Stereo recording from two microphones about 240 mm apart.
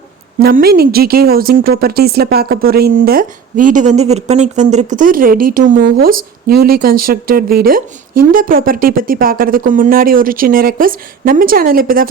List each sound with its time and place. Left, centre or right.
0.3 s speech: right